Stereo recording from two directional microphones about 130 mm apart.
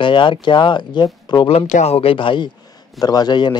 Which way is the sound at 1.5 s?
55° left (ahead or behind).